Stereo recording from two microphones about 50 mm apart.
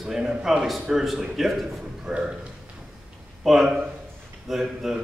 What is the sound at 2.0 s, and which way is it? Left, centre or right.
Speech, centre.